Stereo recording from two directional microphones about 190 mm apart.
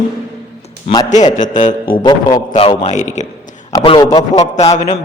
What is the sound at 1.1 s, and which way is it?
Speech, 35° left (ahead or behind).